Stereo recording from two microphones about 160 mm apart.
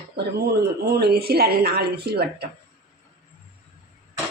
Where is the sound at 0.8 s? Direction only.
80° right.